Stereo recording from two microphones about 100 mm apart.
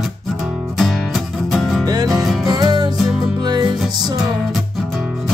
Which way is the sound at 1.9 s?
40° right (ahead or behind).